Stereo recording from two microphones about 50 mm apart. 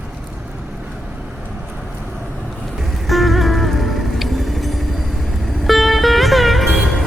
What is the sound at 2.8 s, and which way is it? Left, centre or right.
Music, centre.